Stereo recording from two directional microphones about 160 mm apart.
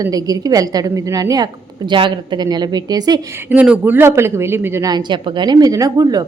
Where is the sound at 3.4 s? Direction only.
5° right (ahead or behind); by 6.3 s 25° right (ahead or behind).